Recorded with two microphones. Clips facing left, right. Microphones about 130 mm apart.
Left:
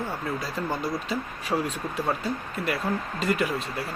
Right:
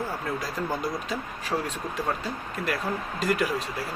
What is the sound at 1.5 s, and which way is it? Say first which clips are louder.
Speech: left 2 dB; 15° left (ahead or behind).